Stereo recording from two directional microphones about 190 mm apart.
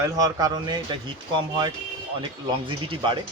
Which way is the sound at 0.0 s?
20° right (ahead or behind).